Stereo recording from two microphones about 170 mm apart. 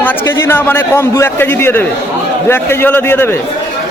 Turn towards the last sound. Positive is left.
turn(degrees=15)  # may be behind; listen again after turning